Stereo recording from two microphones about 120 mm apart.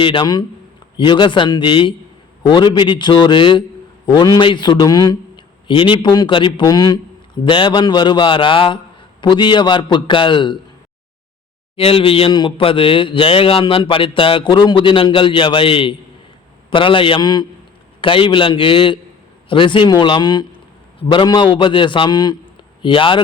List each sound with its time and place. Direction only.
0.0 s a man's voice: 45° left (ahead or behind)
5.6 s a man's voice: 45° left (ahead or behind)
7.4 s a man's voice: 45° left (ahead or behind)
11.8 s a man's voice: 50° left (ahead or behind); by 17.4 s 35° left (ahead or behind)
18.0 s a man's voice: 45° left (ahead or behind)